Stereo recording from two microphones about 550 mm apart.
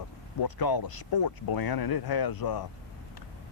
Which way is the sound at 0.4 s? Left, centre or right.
Left.